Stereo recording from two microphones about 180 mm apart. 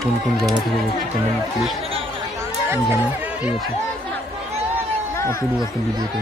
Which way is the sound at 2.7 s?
10° right (ahead or behind).